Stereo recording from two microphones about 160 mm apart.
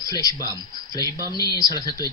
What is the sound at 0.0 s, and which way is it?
Speech, 20° left (ahead or behind).